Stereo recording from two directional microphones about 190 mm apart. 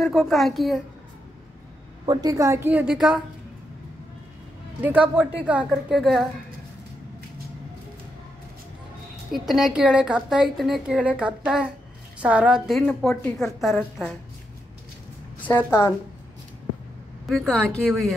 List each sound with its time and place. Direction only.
0.0 s a woman's voice: centre (ahead or behind)
2.0 s a woman's voice: 20° right (ahead or behind); by 3.3 s centre (ahead or behind)
4.8 s a woman's voice: 10° right (ahead or behind)
9.3 s a woman's voice: centre (ahead or behind)
15.4 s a woman's voice: 10° left (ahead or behind)
17.3 s a woman's voice: centre (ahead or behind)